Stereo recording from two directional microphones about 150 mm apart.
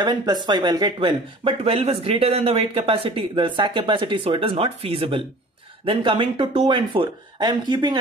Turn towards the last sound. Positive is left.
turn(degrees=-30)  # may be behind; listen again after turning